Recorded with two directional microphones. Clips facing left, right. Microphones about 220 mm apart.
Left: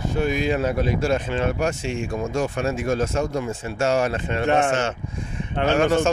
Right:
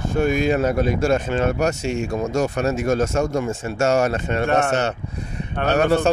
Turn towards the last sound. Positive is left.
turn(degrees=-35)  # may be behind; listen again after turning